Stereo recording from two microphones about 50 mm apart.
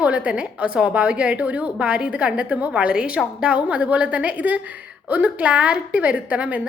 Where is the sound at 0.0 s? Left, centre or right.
Right.